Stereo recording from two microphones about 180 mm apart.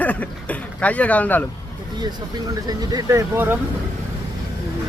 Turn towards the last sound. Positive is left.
turn(degrees=-15)  # may be behind; listen again after turning